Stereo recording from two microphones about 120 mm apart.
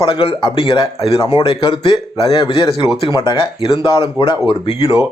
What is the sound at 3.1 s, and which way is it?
Speech, 30° left (ahead or behind).